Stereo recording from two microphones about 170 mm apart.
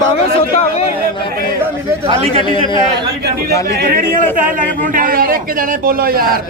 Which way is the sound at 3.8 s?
55° right (ahead or behind).